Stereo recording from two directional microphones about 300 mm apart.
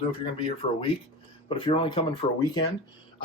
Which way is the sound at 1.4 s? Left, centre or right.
Centre.